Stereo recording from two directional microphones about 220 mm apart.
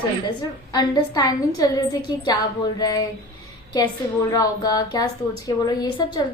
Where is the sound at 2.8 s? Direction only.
15° left (ahead or behind).